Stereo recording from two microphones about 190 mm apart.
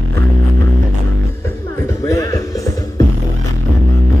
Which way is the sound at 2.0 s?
15° left (ahead or behind).